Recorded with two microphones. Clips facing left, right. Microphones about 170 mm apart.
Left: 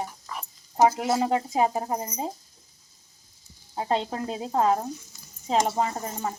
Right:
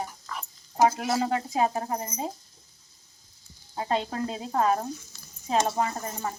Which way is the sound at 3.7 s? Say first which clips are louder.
Left 1 dB; 20° left (ahead or behind).